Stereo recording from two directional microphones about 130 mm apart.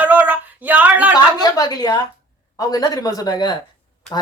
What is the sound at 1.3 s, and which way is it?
Speech, 30° left (ahead or behind).